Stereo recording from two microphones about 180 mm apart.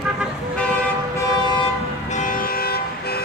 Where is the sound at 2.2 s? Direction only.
50° left (ahead or behind).